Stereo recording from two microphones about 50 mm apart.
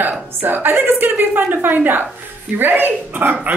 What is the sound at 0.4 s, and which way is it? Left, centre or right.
A woman's voice, right.